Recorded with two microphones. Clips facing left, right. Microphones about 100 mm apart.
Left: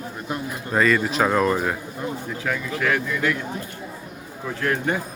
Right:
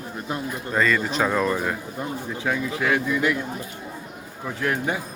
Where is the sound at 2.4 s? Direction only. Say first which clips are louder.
Even; 20° right (ahead or behind).